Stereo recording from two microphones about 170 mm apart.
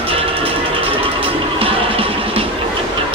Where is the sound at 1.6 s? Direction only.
35° right (ahead or behind).